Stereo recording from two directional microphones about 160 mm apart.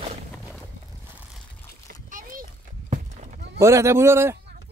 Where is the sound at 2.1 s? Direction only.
55° right (ahead or behind).